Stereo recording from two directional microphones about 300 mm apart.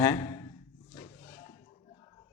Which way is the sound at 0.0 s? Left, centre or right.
Centre.